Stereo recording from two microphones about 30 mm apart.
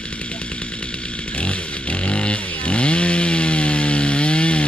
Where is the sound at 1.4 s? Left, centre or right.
Left.